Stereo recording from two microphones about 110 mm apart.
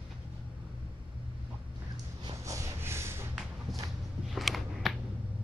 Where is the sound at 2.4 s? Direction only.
30° right (ahead or behind).